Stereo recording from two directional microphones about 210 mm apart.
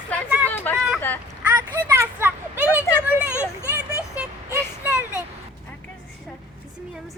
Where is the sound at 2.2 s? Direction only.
10° right (ahead or behind).